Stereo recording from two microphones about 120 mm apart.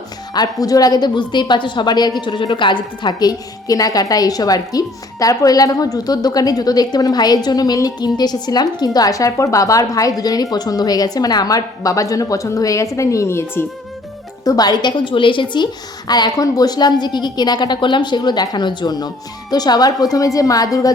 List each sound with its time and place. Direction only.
0.3 s a woman's voice: 30° left (ahead or behind)
14.4 s a woman's voice: 35° left (ahead or behind)